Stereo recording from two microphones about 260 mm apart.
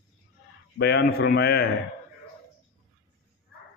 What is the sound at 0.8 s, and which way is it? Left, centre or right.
A man's voice, left.